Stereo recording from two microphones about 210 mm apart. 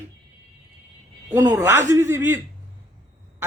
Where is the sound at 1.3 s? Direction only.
15° right (ahead or behind).